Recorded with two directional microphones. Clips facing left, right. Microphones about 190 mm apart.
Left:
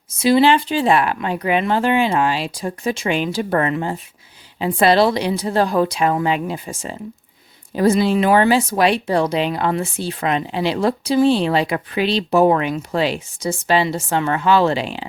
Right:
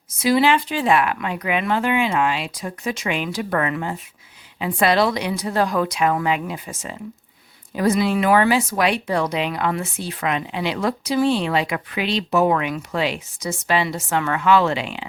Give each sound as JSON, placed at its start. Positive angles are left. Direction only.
{"t": 0.2, "sound": "speech", "side_deg": 30}